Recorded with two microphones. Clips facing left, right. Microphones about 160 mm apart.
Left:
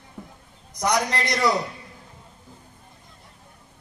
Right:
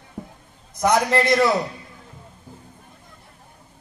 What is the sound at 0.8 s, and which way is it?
Speech, 55° right (ahead or behind).